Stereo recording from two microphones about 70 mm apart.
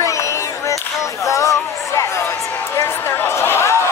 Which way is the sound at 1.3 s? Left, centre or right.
Left.